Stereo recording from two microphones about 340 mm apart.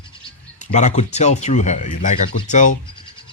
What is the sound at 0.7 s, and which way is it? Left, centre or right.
Speech, centre.